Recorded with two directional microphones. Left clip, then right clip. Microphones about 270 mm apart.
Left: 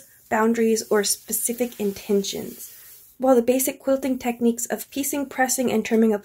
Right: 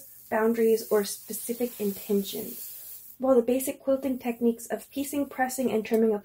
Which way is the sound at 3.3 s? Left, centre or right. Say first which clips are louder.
Left 4 dB; left.